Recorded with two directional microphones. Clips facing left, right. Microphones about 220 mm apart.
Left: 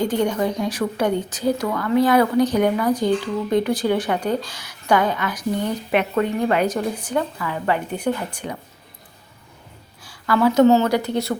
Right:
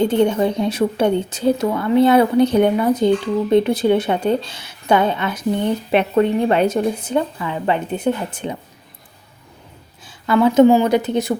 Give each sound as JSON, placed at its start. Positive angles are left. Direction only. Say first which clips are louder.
{"t": 0.0, "sound": "speech", "louder": "right 5 dB", "side_deg": -25}
{"t": 10.0, "sound": "speech", "louder": "right 3 dB", "side_deg": -20}